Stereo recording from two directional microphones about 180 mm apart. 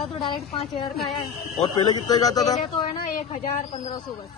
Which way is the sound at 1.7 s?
25° left (ahead or behind).